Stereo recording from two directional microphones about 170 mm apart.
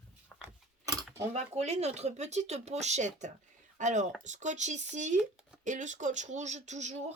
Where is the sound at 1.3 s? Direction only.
40° right (ahead or behind).